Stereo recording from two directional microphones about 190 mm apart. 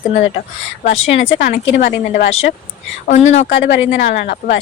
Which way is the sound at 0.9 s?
70° left (ahead or behind).